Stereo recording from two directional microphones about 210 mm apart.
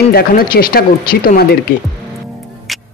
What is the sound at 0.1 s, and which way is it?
Speech, 45° left (ahead or behind).